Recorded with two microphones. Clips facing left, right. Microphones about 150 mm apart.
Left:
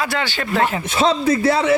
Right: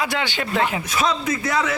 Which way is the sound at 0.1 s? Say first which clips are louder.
Left 2 dB; 15° right (ahead or behind).